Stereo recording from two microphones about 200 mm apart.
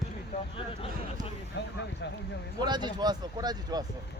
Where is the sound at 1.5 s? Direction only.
60° left (ahead or behind).